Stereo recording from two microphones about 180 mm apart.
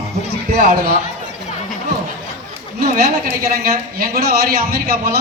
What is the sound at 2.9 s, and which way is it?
A woman's voice, 55° right (ahead or behind).